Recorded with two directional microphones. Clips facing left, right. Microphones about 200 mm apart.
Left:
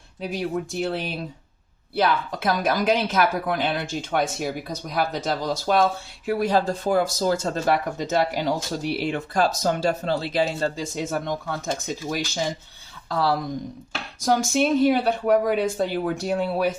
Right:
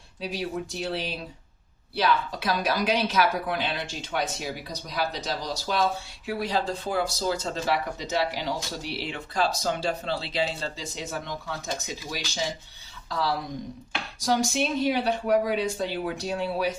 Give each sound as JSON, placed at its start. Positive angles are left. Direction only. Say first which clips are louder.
{"t": 0.2, "sound": "speech", "louder": "left 4 dB", "side_deg": 50}